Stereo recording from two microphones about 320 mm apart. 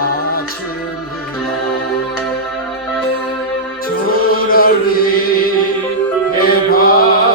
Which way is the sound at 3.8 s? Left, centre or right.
Left.